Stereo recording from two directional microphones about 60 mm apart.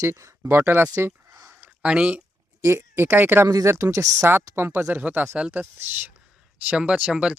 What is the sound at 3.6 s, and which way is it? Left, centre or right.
Speech, right.